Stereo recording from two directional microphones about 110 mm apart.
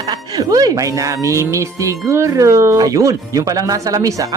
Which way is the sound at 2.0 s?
25° right (ahead or behind).